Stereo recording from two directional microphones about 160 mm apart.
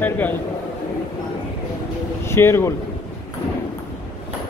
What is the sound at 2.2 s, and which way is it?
Speech, 15° left (ahead or behind).